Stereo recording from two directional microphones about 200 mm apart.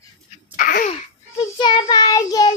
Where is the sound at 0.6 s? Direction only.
40° left (ahead or behind).